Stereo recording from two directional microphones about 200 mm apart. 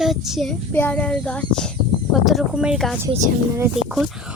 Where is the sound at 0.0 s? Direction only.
Centre (ahead or behind).